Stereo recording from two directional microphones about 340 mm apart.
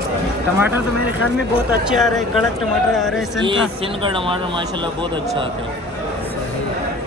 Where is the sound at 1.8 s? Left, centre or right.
Centre.